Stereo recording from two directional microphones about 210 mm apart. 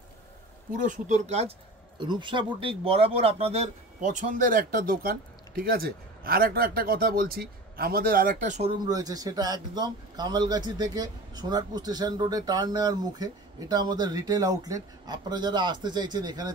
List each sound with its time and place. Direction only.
0.7 s speech: 35° right (ahead or behind)
8.8 s speech: 15° right (ahead or behind)